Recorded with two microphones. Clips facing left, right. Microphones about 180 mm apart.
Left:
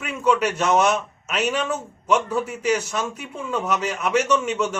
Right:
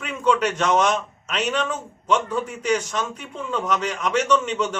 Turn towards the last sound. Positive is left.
turn(degrees=10)  # may be behind; listen again after turning